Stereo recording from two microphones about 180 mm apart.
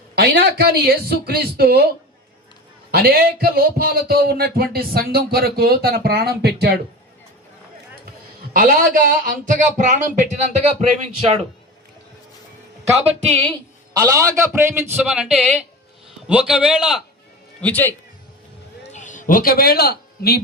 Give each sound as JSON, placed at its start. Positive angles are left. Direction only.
{"t": 0.2, "sound": "speech", "side_deg": -65}
{"t": 2.9, "sound": "speech", "side_deg": -60}
{"t": 8.5, "sound": "speech", "side_deg": -50}
{"t": 13.9, "sound": "a man's voice", "side_deg": -15}
{"t": 16.2, "sound": "a man's voice", "side_deg": -5}
{"t": 17.6, "sound": "a man's voice", "side_deg": 10}
{"t": 18.9, "sound": "a man's voice", "side_deg": 45}